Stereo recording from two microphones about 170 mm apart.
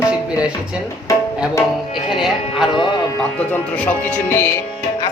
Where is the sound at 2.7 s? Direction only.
30° left (ahead or behind).